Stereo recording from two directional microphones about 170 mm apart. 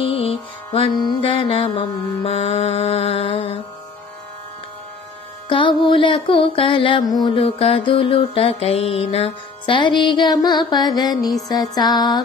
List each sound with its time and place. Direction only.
0.0 s mantra: 35° left (ahead or behind)
5.5 s music: 30° left (ahead or behind)
7.4 s music: 35° left (ahead or behind)